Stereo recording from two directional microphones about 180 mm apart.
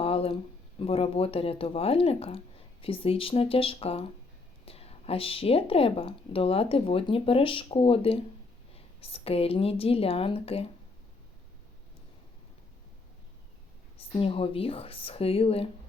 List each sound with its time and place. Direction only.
0.0 s a sound: 30° left (ahead or behind)
0.8 s a woman's voice: 30° left (ahead or behind)
14.0 s a woman's voice: 30° left (ahead or behind)